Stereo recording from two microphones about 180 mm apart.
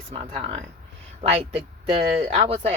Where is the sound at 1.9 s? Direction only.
35° right (ahead or behind).